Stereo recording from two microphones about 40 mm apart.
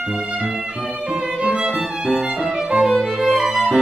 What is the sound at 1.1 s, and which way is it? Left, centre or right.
Violin, right.